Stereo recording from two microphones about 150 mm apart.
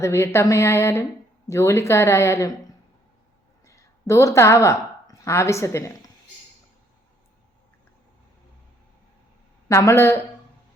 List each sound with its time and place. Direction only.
0.0 s speech: 20° left (ahead or behind)
3.7 s a woman's voice: 20° left (ahead or behind)
9.6 s speech: 20° left (ahead or behind)